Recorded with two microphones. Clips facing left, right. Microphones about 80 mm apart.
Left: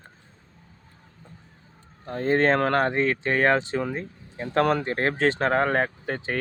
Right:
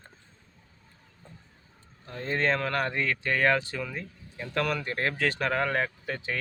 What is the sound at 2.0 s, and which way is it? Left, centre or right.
Speech, left.